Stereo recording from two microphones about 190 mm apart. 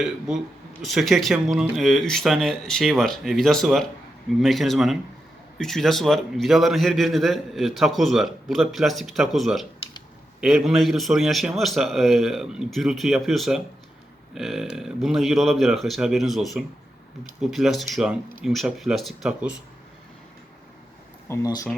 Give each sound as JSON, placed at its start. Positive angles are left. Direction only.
{"t": 0.0, "sound": "a man's voice", "side_deg": -5}
{"t": 21.2, "sound": "speech", "side_deg": 15}